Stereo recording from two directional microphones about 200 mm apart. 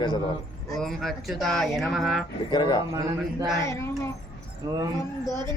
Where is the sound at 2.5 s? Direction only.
20° left (ahead or behind).